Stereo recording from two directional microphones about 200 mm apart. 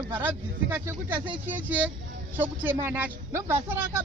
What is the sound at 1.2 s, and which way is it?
Speech, 25° right (ahead or behind).